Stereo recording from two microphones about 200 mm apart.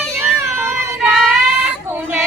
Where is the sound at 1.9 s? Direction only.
10° right (ahead or behind).